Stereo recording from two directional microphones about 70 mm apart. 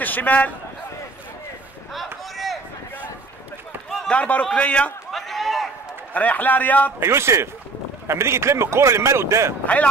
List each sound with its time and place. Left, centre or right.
0.0 s a man's voice: left
2.3 s a sound: centre
4.1 s a man's voice: centre
5.1 s run: centre
6.1 s a man's voice: left
7.0 s a man's voice: right
9.7 s a man's voice: centre